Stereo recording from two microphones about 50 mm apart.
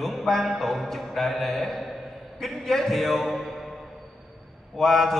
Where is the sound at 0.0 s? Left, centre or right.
Centre.